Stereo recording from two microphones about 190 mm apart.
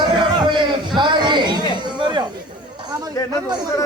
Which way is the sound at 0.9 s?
25° right (ahead or behind).